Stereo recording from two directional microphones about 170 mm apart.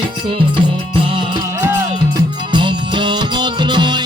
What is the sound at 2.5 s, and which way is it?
Music, 30° right (ahead or behind).